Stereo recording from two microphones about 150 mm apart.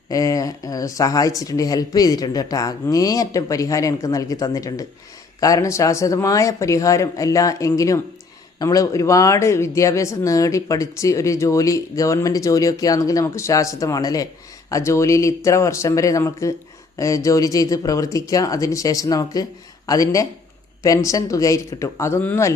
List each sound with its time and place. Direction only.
0.1 s speech: 20° left (ahead or behind)